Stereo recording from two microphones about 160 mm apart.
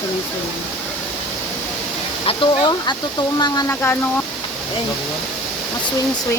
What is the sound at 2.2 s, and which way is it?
Speech, 30° left (ahead or behind).